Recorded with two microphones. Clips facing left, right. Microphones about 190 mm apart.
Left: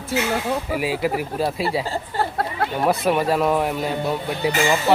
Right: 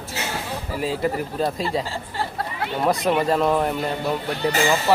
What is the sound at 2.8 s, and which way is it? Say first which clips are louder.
Speech: even; 5° left (ahead or behind).